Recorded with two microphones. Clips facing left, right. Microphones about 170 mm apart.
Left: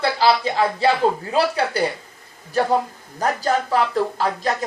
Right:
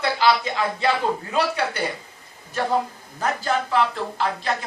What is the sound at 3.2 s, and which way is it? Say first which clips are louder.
Speech: left 3 dB; 40° left (ahead or behind).